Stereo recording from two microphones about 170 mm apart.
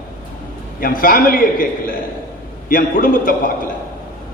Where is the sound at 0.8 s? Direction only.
55° left (ahead or behind).